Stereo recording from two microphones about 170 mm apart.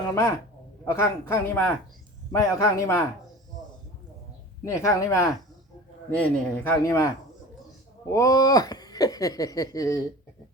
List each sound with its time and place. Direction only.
0.1 s a man's voice: 15° left (ahead or behind)
4.6 s a man's voice: 20° left (ahead or behind)
8.1 s speech: 20° left (ahead or behind)